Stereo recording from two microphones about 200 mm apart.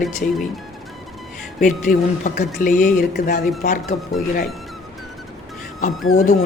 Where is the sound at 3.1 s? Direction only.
55° left (ahead or behind).